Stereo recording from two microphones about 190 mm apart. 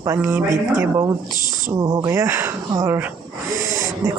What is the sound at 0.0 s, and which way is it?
Speech, 15° right (ahead or behind).